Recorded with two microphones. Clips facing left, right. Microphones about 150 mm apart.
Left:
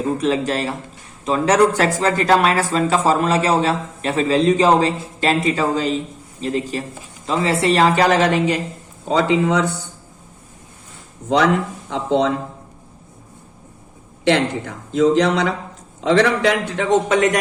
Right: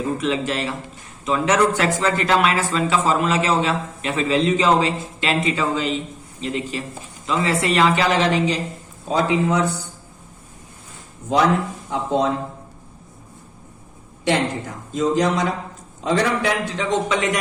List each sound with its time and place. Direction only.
0.2 s speech: 40° left (ahead or behind)
9.0 s speech: 80° left
11.9 s speech: 70° left (ahead or behind)
14.3 s speech: 70° left (ahead or behind); by 17.2 s 50° left (ahead or behind)